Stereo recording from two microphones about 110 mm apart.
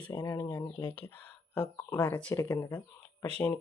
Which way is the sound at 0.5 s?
45° left (ahead or behind).